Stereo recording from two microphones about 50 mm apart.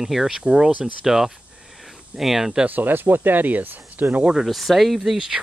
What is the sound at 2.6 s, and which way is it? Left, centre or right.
Speech, right.